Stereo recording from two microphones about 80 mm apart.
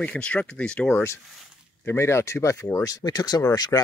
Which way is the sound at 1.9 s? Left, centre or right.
Left.